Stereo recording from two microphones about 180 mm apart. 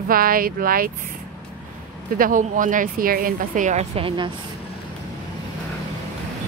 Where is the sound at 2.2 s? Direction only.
50° right (ahead or behind); by 4.3 s 30° right (ahead or behind).